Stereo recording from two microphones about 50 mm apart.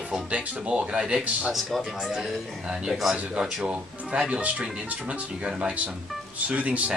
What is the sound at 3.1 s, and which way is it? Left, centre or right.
Speech, centre.